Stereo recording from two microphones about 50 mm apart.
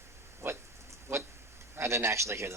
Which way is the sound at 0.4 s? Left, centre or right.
Right.